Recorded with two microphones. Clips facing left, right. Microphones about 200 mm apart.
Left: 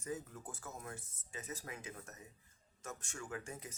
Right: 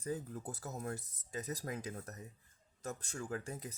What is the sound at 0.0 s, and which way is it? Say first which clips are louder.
Speech: right 4 dB; 35° right (ahead or behind).